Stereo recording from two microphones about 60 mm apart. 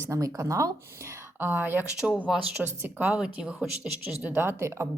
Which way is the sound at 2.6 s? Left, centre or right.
Right.